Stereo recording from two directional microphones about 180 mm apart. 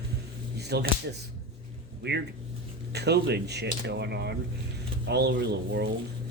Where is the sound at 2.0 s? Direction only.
65° right (ahead or behind).